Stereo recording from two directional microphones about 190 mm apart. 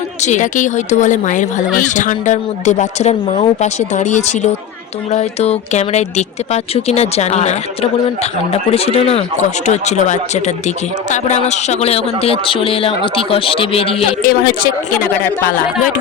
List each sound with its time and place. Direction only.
0.2 s a man's voice: 40° left (ahead or behind)
14.2 s speech: 50° left (ahead or behind)